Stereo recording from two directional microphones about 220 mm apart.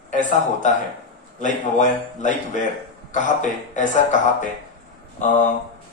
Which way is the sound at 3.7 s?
35° left (ahead or behind).